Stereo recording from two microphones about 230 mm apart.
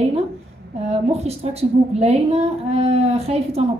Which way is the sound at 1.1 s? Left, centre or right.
Right.